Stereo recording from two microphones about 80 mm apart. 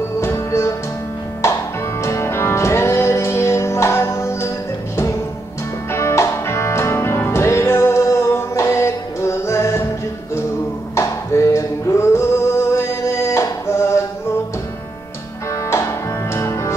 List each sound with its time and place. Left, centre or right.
0.2 s music: left
5.9 s music: left
11.0 s music: left
16.3 s music: left